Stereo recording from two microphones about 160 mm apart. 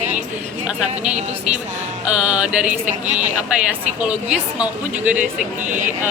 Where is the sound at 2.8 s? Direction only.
50° right (ahead or behind).